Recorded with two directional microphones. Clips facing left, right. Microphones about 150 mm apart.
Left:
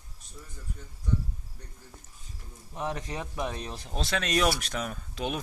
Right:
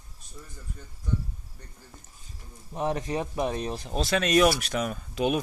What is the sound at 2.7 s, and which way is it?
A man's voice, 20° right (ahead or behind).